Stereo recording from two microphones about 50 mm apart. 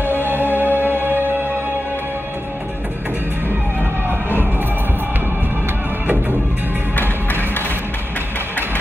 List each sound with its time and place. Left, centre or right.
0.0 s music: right
7.0 s music: left